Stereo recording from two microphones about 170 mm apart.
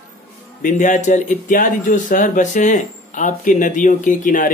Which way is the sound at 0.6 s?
50° left (ahead or behind).